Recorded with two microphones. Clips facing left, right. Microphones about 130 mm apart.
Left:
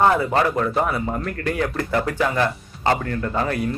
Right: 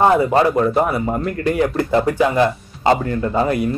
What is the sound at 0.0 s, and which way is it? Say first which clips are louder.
A man's voice: right 4 dB; 15° right (ahead or behind).